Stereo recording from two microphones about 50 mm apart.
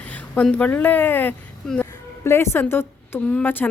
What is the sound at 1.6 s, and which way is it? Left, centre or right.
Speech, centre.